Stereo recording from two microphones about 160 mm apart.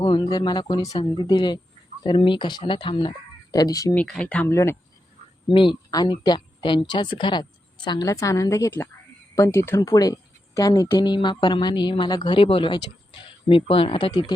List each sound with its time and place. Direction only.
0.0 s speech: 25° left (ahead or behind)
3.9 s speech: 5° left (ahead or behind)
5.5 s speech: 30° left (ahead or behind)